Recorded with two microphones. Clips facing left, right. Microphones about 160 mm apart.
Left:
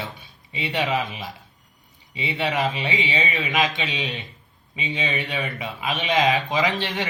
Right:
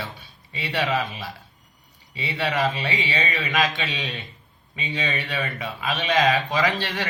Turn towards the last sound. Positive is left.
turn(degrees=20)  # may be behind; listen again after turning